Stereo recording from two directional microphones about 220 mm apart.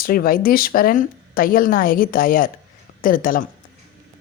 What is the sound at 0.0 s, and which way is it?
Speech, 40° left (ahead or behind).